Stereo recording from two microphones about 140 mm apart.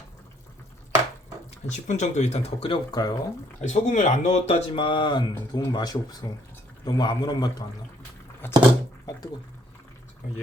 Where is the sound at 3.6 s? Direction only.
60° left (ahead or behind); by 7.5 s 30° left (ahead or behind).